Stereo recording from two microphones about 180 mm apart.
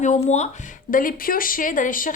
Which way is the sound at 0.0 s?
40° left (ahead or behind).